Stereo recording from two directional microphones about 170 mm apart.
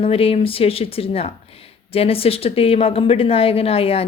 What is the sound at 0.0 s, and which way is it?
A woman's voice, 35° left (ahead or behind).